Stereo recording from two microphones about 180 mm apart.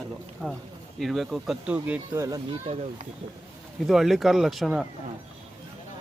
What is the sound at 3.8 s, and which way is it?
Speech, centre (ahead or behind).